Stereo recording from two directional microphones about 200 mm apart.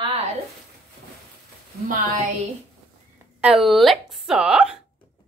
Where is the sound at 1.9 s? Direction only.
35° right (ahead or behind).